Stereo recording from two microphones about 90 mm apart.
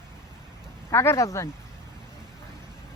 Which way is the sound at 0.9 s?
30° left (ahead or behind).